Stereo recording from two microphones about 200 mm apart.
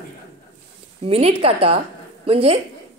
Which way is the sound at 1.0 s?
30° right (ahead or behind).